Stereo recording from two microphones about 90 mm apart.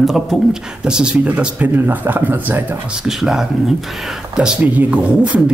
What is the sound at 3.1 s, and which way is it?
Speech, 5° right (ahead or behind).